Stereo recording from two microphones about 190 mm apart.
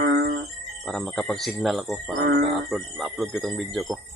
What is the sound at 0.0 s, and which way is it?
Music, 60° right (ahead or behind).